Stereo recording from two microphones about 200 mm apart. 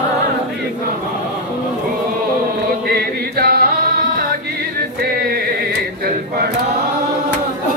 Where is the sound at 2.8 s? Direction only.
50° right (ahead or behind).